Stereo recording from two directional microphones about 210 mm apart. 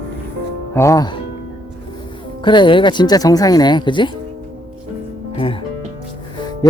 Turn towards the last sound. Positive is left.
turn(degrees=25)  # may be behind; listen again after turning